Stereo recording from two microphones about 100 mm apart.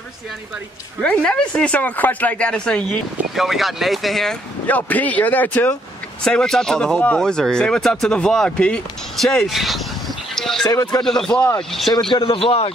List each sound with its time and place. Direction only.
1.0 s speech: 10° left (ahead or behind)
3.3 s speech: centre (ahead or behind)
4.6 s speech: 15° left (ahead or behind)
6.2 s speech: 5° left (ahead or behind)
10.3 s a sound: 5° left (ahead or behind)
10.7 s speech: 40° left (ahead or behind)
11.1 s speech: 5° left (ahead or behind)
12.1 s speech: 65° left (ahead or behind)